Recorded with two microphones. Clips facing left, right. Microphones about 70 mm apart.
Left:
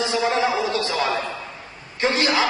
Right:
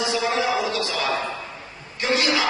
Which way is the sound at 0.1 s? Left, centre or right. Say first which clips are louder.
Left 2 dB; left.